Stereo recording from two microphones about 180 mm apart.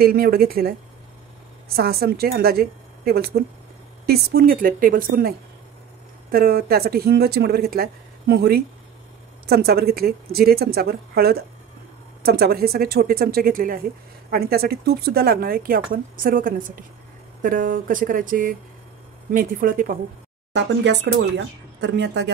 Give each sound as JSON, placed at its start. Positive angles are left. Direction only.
{"t": 0.0, "sound": "speech", "side_deg": -55}
{"t": 1.8, "sound": "a woman's voice", "side_deg": -55}
{"t": 6.3, "sound": "a woman's voice", "side_deg": -55}
{"t": 20.5, "sound": "speech", "side_deg": -80}